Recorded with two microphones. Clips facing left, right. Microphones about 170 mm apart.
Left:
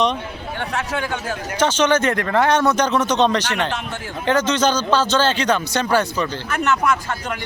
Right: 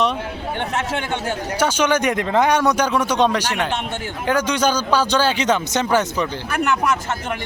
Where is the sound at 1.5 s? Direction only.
10° right (ahead or behind).